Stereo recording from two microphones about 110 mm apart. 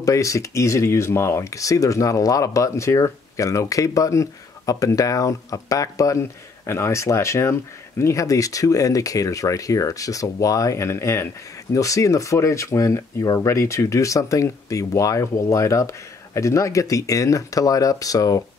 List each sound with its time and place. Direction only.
0.0 s speech: 30° left (ahead or behind)